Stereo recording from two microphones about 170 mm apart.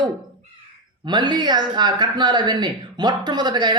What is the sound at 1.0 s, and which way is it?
Speech, 25° right (ahead or behind).